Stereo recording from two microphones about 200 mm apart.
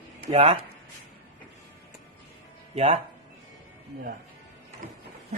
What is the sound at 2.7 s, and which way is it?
Speech, 30° right (ahead or behind).